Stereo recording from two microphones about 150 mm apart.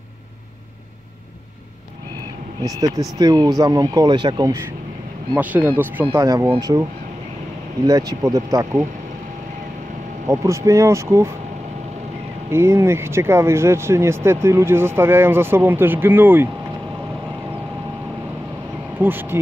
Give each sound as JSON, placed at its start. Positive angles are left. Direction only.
{"t": 2.6, "sound": "speech", "side_deg": -25}
{"t": 5.4, "sound": "speech", "side_deg": -10}
{"t": 7.8, "sound": "speech", "side_deg": -25}
{"t": 10.2, "sound": "speech", "side_deg": -20}
{"t": 12.4, "sound": "speech", "side_deg": -15}
{"t": 18.9, "sound": "speech", "side_deg": -15}